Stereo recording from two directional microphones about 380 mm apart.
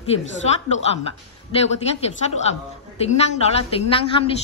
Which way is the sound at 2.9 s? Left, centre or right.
Centre.